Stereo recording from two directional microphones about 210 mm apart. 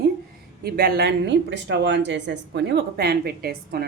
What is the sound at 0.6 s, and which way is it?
Speech, 45° right (ahead or behind).